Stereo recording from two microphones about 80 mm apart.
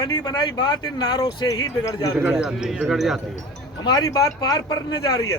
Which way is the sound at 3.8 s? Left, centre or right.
Left.